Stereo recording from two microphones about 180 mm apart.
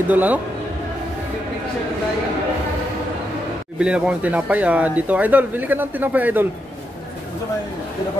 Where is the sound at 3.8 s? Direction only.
5° right (ahead or behind).